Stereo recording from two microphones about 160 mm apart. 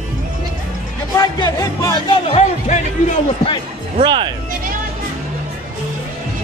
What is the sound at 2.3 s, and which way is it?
Music, 45° left (ahead or behind).